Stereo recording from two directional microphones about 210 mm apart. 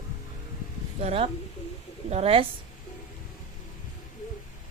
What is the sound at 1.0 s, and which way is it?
Speech, 25° right (ahead or behind).